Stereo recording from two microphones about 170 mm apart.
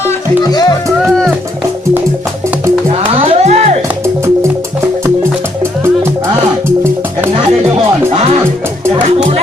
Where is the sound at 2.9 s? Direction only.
35° right (ahead or behind).